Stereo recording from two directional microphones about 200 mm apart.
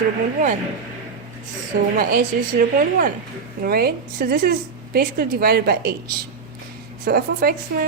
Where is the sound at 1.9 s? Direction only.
45° right (ahead or behind).